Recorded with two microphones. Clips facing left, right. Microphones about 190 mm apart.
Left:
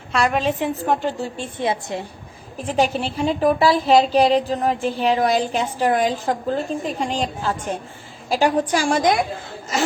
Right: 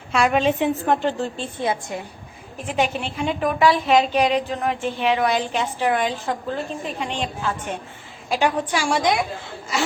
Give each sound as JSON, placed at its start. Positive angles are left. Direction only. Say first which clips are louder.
{"t": 0.1, "sound": "a woman's voice", "louder": "right 1 dB", "side_deg": 0}
{"t": 1.6, "sound": "a woman's voice", "louder": "left 2 dB", "side_deg": 25}
{"t": 2.6, "sound": "a woman's voice", "louder": "left 3 dB", "side_deg": 35}